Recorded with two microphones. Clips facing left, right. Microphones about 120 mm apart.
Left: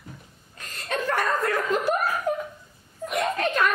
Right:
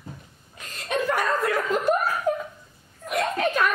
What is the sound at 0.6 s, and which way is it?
Chuckle, 15° right (ahead or behind).